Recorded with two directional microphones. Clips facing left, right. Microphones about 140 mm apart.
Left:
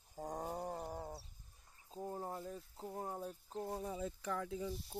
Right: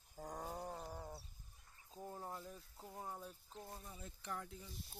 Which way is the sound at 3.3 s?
45° left (ahead or behind).